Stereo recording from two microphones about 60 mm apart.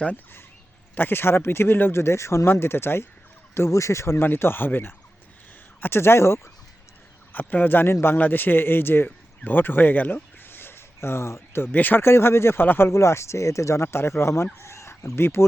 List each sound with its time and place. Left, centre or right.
0.9 s speech: left
2.5 s speech: left
7.3 s speech: left
9.0 s a sound: left
11.6 s speech: left
12.6 s speech: left
12.9 s speech: left